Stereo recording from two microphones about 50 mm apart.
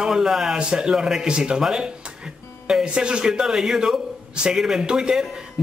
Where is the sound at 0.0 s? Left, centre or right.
Centre.